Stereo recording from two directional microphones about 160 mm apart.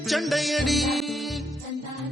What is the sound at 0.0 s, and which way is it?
Music, centre (ahead or behind).